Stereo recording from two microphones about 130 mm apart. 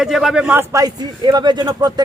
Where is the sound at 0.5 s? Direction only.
25° right (ahead or behind).